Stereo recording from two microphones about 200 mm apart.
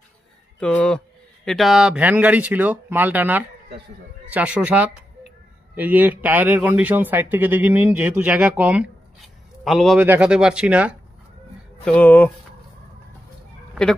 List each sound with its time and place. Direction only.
0.6 s a man's voice: 5° left (ahead or behind)
11.8 s speech: 5° left (ahead or behind)